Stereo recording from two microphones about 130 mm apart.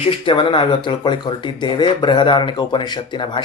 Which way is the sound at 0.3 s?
40° left (ahead or behind).